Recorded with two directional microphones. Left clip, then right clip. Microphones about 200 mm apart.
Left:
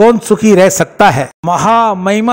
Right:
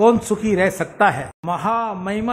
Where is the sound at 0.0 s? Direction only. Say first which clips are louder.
Left 8 dB; 35° left (ahead or behind).